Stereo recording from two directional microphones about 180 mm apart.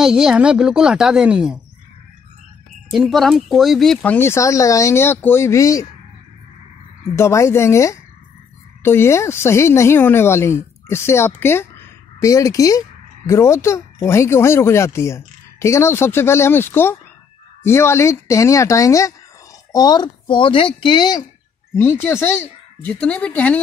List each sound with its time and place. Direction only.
0.0 s a woman's voice: 5° right (ahead or behind)
2.9 s speech: centre (ahead or behind); by 5.9 s 20° left (ahead or behind)
7.2 s speech: 15° left (ahead or behind)